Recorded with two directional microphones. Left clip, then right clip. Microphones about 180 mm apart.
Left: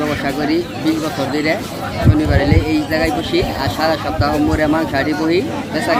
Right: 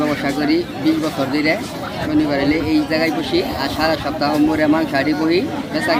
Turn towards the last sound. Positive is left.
turn(degrees=-10)  # may be behind; listen again after turning